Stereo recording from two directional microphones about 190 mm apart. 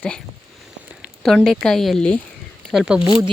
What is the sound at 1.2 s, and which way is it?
Speech, centre (ahead or behind).